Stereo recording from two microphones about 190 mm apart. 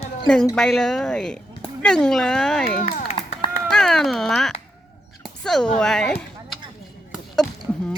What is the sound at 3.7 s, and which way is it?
Speech, 5° left (ahead or behind).